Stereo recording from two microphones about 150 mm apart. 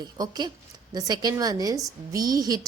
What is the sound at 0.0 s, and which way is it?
A woman's voice, 30° right (ahead or behind).